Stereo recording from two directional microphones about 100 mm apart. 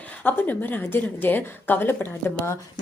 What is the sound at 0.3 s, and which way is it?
Speech, 20° left (ahead or behind).